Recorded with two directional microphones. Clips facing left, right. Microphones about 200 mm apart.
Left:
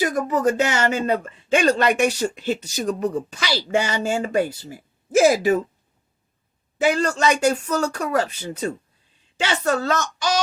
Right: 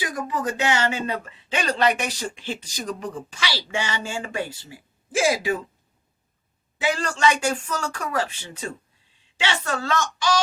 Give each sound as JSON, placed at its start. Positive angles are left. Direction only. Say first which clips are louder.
{"t": 0.0, "sound": "speech", "louder": "left 7 dB", "side_deg": 45}
{"t": 6.9, "sound": "speech", "louder": "left 2 dB", "side_deg": 40}